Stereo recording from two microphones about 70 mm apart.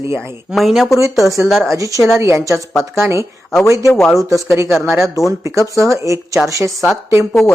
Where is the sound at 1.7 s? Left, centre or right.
Right.